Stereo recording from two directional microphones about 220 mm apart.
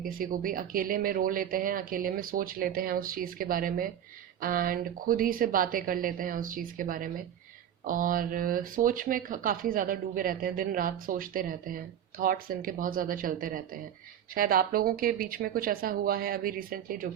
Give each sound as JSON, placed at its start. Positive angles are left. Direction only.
{"t": 0.0, "sound": "speech", "side_deg": -40}